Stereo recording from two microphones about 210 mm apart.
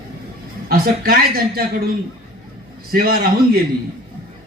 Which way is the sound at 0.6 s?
45° right (ahead or behind).